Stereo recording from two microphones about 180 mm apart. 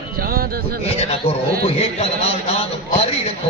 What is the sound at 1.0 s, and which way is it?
A man's voice, 35° left (ahead or behind).